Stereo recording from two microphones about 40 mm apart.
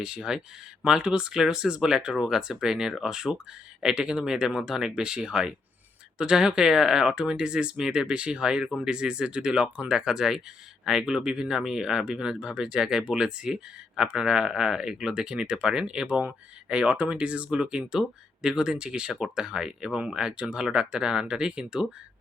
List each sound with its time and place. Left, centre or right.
0.0 s speech: centre
17.5 s speech: centre